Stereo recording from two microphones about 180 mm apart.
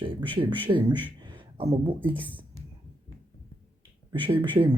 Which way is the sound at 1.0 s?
25° right (ahead or behind).